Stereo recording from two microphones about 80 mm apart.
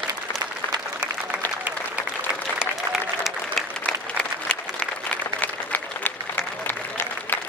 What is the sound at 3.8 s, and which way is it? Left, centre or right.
Applause, centre.